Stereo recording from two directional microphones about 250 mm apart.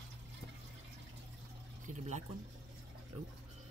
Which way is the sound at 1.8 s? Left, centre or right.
Right.